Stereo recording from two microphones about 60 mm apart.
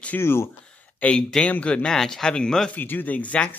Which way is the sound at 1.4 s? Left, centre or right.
Left.